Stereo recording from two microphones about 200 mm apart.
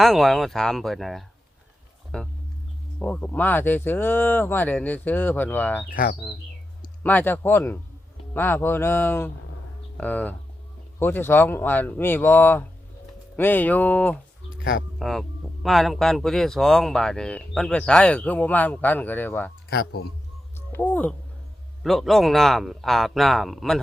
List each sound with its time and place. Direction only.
0.0 s speech: centre (ahead or behind)
5.9 s speech: 45° left (ahead or behind)
7.0 s speech: 10° left (ahead or behind)
14.6 s speech: 50° left (ahead or behind)
14.9 s speech: centre (ahead or behind)
19.7 s speech: 55° left (ahead or behind)
20.6 s speech: 10° left (ahead or behind)